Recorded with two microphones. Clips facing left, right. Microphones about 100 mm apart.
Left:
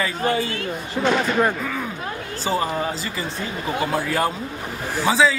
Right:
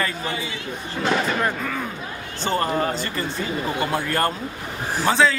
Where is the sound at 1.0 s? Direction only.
10° left (ahead or behind).